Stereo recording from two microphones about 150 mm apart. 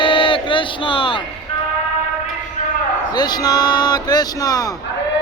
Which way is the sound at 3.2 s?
25° left (ahead or behind).